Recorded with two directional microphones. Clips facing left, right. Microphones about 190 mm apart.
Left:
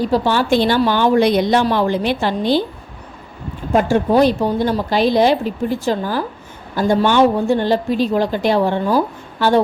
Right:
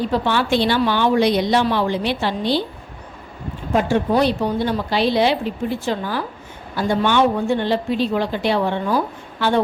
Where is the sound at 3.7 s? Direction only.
45° left (ahead or behind).